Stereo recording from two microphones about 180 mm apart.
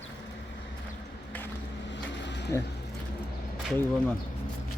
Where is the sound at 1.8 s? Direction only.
80° left.